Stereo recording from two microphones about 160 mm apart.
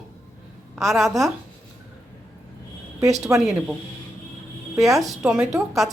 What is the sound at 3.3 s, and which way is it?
Speech, 15° right (ahead or behind).